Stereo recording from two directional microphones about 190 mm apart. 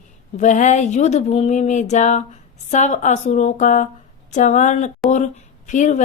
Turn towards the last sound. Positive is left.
turn(degrees=40)  # may be behind; listen again after turning